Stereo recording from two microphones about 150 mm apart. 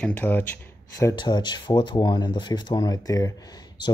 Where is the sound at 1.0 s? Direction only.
25° left (ahead or behind).